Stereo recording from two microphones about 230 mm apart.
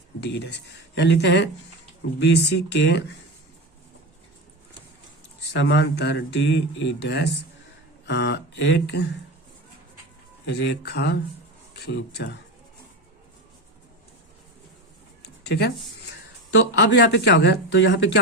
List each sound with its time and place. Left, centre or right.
0.2 s speech: left
5.4 s speech: left
8.0 s a sound: left
8.9 s speech: left
10.4 s speech: left
15.2 s a sound: left
16.5 s speech: left